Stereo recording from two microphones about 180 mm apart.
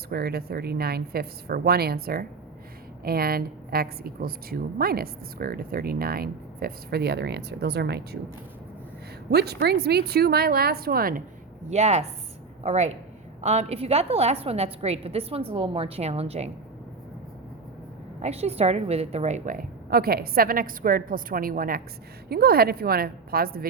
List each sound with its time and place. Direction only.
0.1 s a woman's voice: 60° right (ahead or behind)
9.3 s a woman's voice: 65° right (ahead or behind)
11.7 s a woman's voice: 40° right (ahead or behind)
18.2 s a woman's voice: 35° right (ahead or behind); by 23.6 s 55° right (ahead or behind)